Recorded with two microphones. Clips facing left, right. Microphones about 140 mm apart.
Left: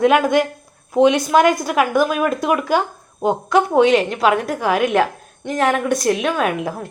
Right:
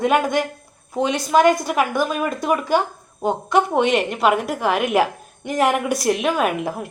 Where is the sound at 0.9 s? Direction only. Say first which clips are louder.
Left 4 dB; 15° left (ahead or behind).